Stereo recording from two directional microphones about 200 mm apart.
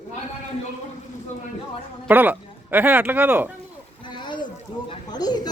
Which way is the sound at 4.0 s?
20° left (ahead or behind).